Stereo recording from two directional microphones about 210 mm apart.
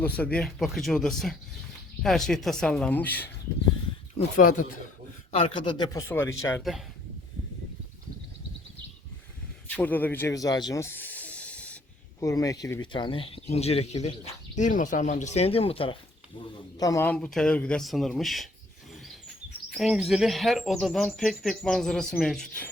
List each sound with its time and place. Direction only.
0.0 s speech: 5° left (ahead or behind)
4.4 s speech: 40° left (ahead or behind)
5.4 s speech: 20° left (ahead or behind)
6.6 s speech: centre (ahead or behind)
9.6 s a sound: 10° left (ahead or behind)
12.2 s speech: 15° left (ahead or behind)
16.7 s speech: 15° left (ahead or behind)
17.2 s speech: centre (ahead or behind)
19.7 s speech: centre (ahead or behind)